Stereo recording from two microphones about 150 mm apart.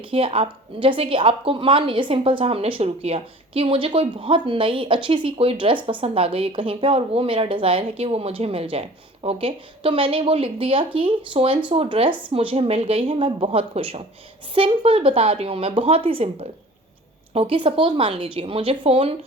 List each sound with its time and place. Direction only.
0.0 s a woman's voice: 40° right (ahead or behind)